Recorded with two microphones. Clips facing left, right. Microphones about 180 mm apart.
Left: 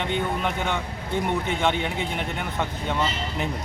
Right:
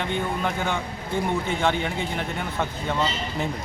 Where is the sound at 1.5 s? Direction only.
20° left (ahead or behind).